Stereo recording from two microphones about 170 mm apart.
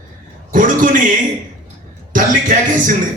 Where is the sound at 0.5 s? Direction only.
50° right (ahead or behind).